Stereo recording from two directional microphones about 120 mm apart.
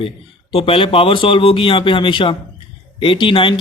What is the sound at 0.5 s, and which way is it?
Speech, 50° left (ahead or behind).